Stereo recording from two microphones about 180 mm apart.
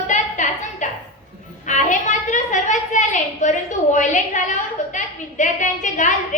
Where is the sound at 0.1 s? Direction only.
45° left (ahead or behind).